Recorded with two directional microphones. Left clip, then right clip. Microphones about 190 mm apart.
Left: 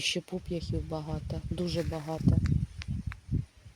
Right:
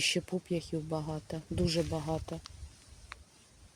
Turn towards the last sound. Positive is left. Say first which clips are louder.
# left 1 dB
turn(degrees=10)  # may be behind; listen again after turning